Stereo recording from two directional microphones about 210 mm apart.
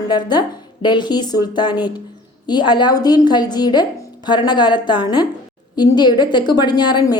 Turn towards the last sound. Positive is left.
turn(degrees=20)  # may be behind; listen again after turning